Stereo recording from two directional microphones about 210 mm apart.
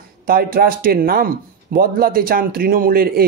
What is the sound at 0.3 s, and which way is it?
Speech, 45° right (ahead or behind).